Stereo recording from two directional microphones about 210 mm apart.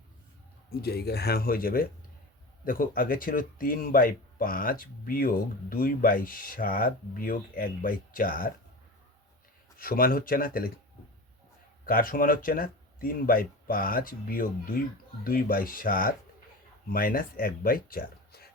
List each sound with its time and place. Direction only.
0.7 s speech: 50° left (ahead or behind)
9.7 s speech: 45° left (ahead or behind)
11.9 s speech: 40° left (ahead or behind)